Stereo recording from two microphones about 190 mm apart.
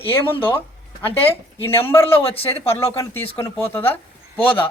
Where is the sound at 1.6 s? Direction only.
10° left (ahead or behind).